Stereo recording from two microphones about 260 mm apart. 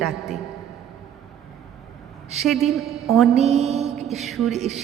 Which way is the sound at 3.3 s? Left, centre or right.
Right.